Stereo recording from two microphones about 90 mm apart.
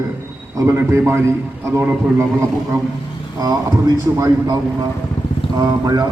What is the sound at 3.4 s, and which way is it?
Speech, 45° right (ahead or behind).